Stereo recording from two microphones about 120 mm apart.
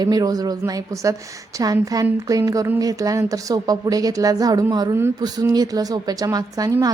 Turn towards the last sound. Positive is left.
turn(degrees=-30)  # may be behind; listen again after turning